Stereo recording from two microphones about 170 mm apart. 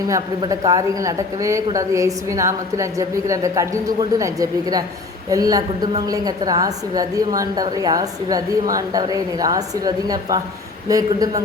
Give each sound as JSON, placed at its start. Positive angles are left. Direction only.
{"t": 0.1, "sound": "speech", "side_deg": -20}